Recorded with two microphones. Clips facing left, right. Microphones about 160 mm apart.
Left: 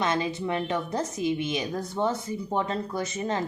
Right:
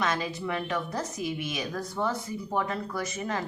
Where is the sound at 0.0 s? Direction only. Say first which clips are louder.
Left 3 dB; 25° left (ahead or behind).